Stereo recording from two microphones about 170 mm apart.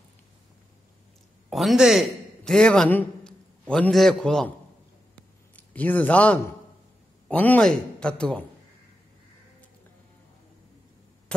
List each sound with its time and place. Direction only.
1.5 s a man's voice: centre (ahead or behind)
5.6 s a man's voice: 10° left (ahead or behind)